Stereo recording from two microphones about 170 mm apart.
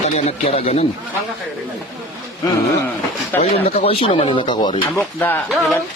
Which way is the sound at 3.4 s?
35° left (ahead or behind).